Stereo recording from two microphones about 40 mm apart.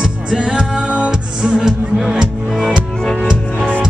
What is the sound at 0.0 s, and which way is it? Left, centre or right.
Music, centre.